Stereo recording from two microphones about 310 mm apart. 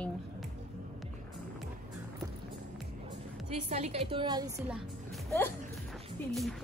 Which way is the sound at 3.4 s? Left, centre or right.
Right.